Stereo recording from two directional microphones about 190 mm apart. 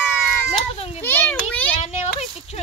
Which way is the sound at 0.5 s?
30° left (ahead or behind).